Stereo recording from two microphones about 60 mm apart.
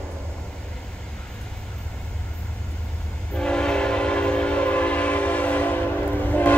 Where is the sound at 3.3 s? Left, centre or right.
Centre.